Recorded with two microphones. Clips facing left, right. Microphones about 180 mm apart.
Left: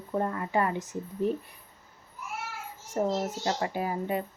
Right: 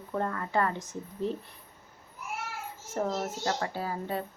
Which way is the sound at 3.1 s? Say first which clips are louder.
Left 2 dB; 20° left (ahead or behind).